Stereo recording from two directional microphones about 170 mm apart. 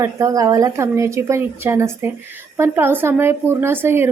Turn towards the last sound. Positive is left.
turn(degrees=-15)  # may be behind; listen again after turning